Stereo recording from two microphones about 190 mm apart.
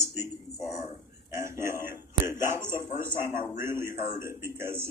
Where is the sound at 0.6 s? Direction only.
20° left (ahead or behind).